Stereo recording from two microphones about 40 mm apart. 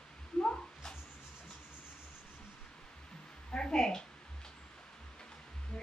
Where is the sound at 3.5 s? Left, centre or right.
Centre.